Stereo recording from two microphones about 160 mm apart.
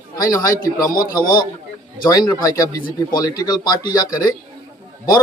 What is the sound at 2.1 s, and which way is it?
Speech, 25° left (ahead or behind).